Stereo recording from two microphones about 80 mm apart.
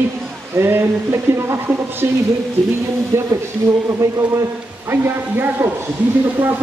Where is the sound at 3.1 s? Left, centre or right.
Right.